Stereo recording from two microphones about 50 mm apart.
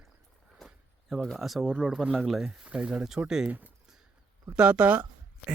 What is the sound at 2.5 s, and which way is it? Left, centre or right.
Speech, centre.